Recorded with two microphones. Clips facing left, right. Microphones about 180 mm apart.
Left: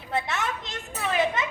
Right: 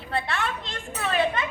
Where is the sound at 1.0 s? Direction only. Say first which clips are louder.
Right 1 dB; 15° left (ahead or behind).